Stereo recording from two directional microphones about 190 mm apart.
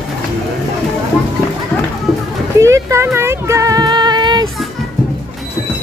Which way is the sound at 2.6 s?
15° right (ahead or behind).